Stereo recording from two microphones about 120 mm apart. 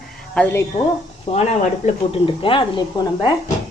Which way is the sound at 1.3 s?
55° left (ahead or behind).